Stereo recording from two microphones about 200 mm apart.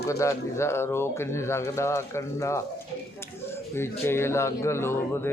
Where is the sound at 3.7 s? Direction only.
10° left (ahead or behind).